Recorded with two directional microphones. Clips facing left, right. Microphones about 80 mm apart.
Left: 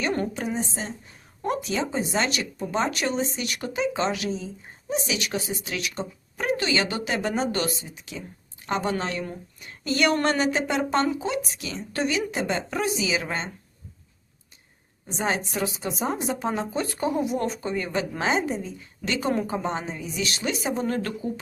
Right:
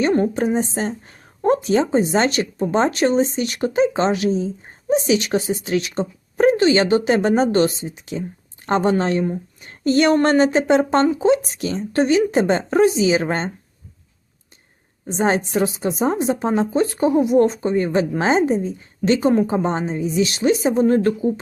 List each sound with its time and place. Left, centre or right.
0.3 s a woman's voice: right
1.4 s speech: right
15.0 s a woman's voice: right